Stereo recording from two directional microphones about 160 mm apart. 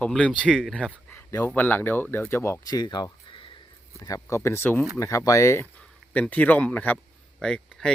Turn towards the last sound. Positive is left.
turn(degrees=5)  # may be behind; listen again after turning